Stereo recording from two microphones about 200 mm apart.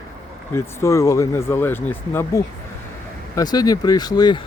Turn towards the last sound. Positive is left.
turn(degrees=20)  # may be behind; listen again after turning